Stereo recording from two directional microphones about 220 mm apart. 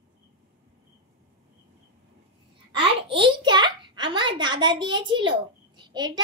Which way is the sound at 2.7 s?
25° right (ahead or behind).